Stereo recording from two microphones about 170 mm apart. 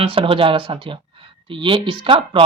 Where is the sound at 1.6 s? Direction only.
30° right (ahead or behind).